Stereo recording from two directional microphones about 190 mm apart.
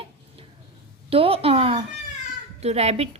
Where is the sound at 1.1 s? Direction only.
30° right (ahead or behind).